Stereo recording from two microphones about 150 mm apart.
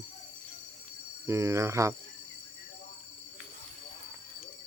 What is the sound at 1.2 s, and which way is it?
Speech, 20° right (ahead or behind).